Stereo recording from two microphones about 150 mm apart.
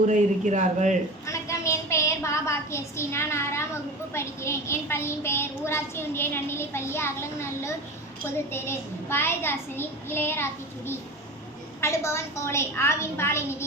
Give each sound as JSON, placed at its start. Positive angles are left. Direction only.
{"t": 0.1, "sound": "speech", "side_deg": -55}
{"t": 1.3, "sound": "a sound", "side_deg": 20}
{"t": 4.1, "sound": "a child's voice", "side_deg": 15}